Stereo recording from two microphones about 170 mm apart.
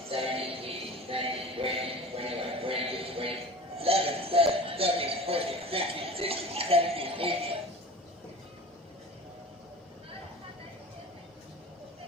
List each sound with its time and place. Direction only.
0.1 s music: 35° right (ahead or behind)